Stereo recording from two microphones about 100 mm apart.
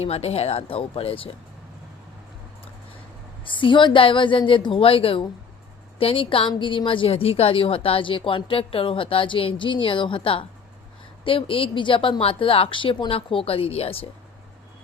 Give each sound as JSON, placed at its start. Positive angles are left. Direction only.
{"t": 0.0, "sound": "speech", "side_deg": 90}
{"t": 3.4, "sound": "a woman's voice", "side_deg": 55}